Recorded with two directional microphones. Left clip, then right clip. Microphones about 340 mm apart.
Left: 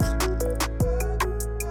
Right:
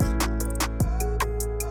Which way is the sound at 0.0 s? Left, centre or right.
Centre.